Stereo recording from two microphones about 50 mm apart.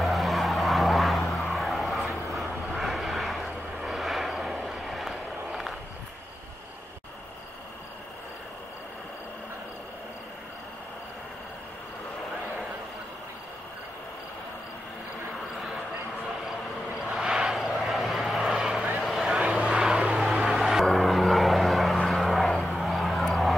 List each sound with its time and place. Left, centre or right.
0.0 s vehicle: centre
16.4 s vehicle: centre